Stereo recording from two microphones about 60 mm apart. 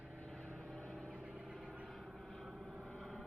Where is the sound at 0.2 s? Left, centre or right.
Centre.